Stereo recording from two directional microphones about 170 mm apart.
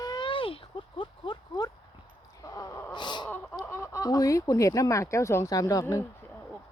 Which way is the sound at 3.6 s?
15° left (ahead or behind).